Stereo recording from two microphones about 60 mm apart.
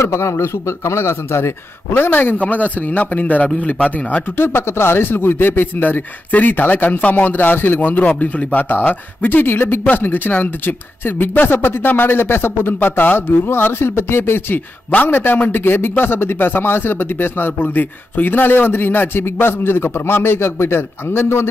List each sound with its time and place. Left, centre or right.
0.0 s a man's voice: left
4.4 s speech: left